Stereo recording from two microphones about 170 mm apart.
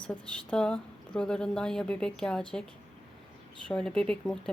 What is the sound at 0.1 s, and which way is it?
A woman's voice, 5° left (ahead or behind).